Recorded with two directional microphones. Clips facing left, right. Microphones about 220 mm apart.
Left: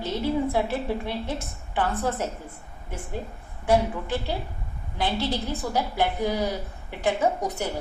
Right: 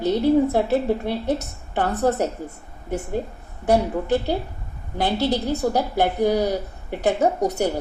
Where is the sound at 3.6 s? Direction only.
40° right (ahead or behind).